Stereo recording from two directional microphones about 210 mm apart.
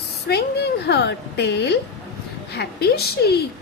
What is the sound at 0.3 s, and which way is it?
A woman's voice, 50° left (ahead or behind).